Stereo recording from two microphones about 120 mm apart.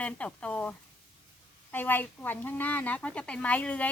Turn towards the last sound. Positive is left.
turn(degrees=10)  # may be behind; listen again after turning